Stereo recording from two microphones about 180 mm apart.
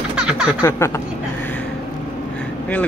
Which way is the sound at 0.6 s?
15° left (ahead or behind).